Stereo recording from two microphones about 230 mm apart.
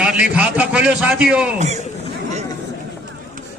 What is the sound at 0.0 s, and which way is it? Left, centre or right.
A man's voice, centre.